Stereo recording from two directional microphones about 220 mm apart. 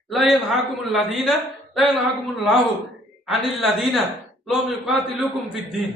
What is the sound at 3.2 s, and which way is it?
A man's voice, centre (ahead or behind).